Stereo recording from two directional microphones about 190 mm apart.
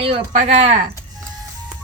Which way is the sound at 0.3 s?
30° right (ahead or behind).